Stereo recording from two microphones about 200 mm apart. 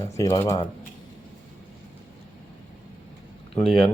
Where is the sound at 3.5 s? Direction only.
5° left (ahead or behind).